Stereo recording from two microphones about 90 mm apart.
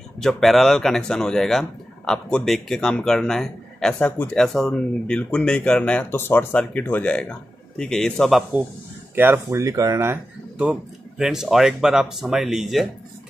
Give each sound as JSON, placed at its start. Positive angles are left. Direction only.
{"t": 0.2, "sound": "speech", "side_deg": 0}
{"t": 6.1, "sound": "speech", "side_deg": 25}
{"t": 9.1, "sound": "speech", "side_deg": -25}
{"t": 10.6, "sound": "speech", "side_deg": -10}